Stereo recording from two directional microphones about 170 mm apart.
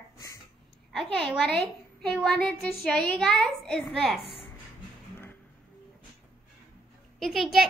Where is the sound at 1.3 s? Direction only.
Centre (ahead or behind).